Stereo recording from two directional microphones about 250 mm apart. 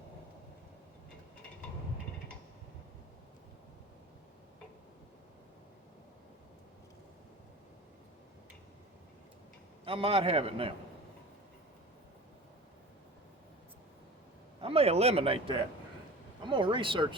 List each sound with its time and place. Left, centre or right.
9.8 s a man's voice: right
14.6 s a man's voice: right